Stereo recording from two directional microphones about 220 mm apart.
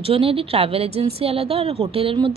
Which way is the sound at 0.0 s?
25° right (ahead or behind).